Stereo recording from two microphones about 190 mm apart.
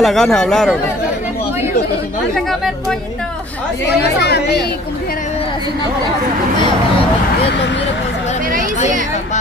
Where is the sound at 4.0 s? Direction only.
60° left (ahead or behind).